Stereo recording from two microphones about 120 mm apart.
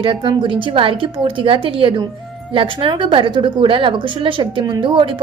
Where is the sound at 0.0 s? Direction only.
45° right (ahead or behind).